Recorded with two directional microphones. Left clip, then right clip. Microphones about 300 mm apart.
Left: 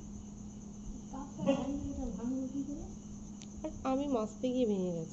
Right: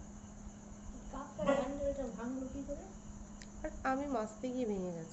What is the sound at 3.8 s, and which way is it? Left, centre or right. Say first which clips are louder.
A woman's voice: left 2 dB; right.